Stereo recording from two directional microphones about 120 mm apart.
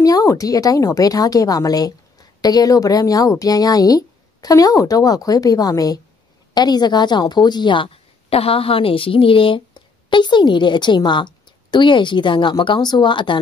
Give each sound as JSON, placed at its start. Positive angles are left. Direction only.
{"t": 0.0, "sound": "a woman's voice", "side_deg": 30}